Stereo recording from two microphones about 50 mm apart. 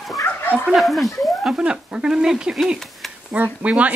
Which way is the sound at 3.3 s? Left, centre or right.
Right.